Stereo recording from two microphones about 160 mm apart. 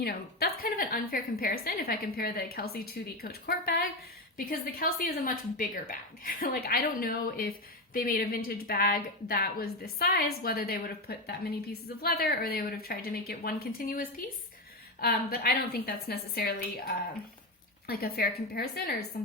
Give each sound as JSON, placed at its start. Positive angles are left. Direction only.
{"t": 0.0, "sound": "a woman's voice", "side_deg": 70}
{"t": 4.4, "sound": "a woman's voice", "side_deg": 65}